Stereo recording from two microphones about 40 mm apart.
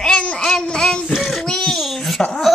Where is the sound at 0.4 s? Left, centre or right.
Centre.